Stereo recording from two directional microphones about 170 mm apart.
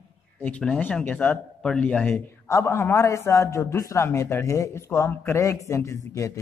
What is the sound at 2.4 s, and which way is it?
A man's voice, 15° left (ahead or behind).